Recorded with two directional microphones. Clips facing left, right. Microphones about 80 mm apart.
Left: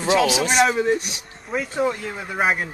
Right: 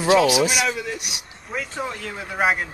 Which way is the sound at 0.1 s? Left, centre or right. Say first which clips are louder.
Right 2 dB; centre.